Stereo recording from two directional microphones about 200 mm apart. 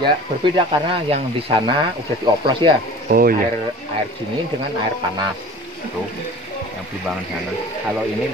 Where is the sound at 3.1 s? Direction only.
45° right (ahead or behind).